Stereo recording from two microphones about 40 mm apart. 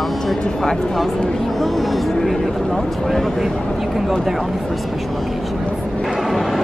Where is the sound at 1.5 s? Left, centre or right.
Centre.